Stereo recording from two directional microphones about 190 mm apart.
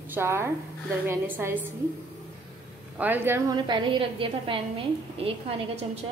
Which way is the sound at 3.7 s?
25° right (ahead or behind).